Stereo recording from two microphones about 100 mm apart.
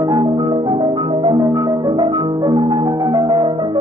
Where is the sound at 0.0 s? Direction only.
45° right (ahead or behind).